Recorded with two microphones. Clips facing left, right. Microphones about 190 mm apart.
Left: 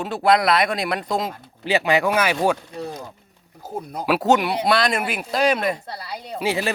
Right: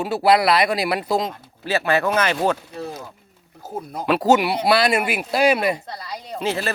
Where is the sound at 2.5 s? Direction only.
5° right (ahead or behind).